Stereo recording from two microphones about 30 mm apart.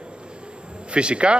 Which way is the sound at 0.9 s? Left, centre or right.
Right.